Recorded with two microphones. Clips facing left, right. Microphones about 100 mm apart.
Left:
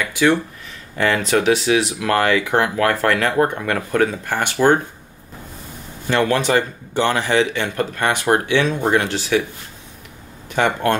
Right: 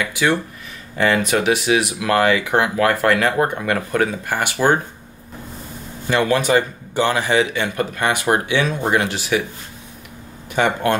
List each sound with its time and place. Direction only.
0.0 s speech: 10° right (ahead or behind)
6.0 s speech: 15° right (ahead or behind)
10.5 s speech: 10° right (ahead or behind)